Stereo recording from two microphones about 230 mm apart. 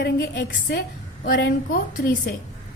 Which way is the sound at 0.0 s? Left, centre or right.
Left.